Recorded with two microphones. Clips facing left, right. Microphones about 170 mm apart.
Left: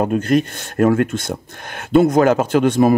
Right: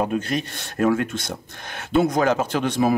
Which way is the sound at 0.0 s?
50° left (ahead or behind).